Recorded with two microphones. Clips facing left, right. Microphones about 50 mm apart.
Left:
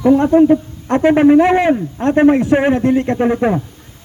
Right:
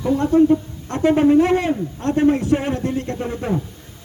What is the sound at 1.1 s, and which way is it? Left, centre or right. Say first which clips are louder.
Speech: left 4 dB; left.